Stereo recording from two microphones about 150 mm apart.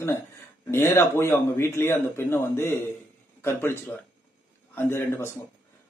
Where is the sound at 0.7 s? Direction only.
15° left (ahead or behind).